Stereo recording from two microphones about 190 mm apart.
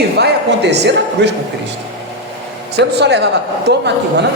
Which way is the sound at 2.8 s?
60° right (ahead or behind).